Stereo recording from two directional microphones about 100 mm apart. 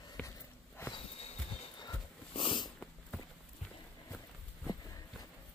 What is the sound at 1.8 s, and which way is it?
Dog, 50° left (ahead or behind).